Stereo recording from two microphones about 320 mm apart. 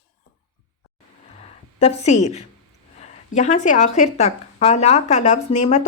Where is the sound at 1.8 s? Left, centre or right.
Centre.